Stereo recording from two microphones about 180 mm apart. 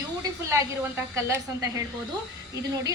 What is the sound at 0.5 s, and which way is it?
Speech, 15° right (ahead or behind).